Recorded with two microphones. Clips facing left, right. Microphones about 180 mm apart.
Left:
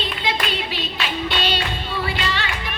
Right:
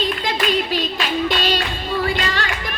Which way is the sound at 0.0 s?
45° right (ahead or behind).